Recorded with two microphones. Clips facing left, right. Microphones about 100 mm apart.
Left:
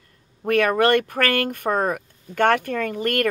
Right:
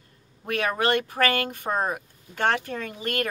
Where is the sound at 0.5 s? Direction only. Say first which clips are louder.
Left 7 dB; 50° left (ahead or behind).